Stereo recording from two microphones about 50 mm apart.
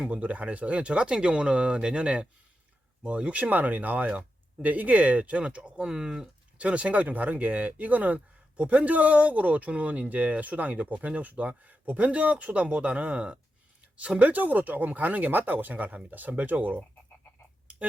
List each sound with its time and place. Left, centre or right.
0.0 s speech: right